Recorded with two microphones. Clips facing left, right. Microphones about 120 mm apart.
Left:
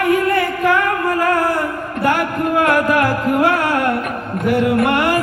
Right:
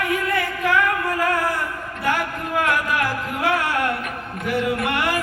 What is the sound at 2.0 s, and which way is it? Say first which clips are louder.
Music: left 7 dB; 60° left (ahead or behind).